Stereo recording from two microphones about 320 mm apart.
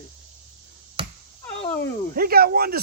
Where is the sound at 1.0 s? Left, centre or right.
Centre.